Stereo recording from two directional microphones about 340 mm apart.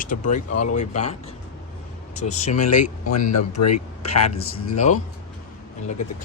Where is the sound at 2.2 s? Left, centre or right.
Centre.